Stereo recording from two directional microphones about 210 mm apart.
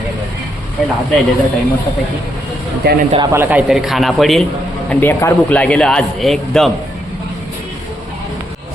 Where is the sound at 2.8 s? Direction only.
50° right (ahead or behind).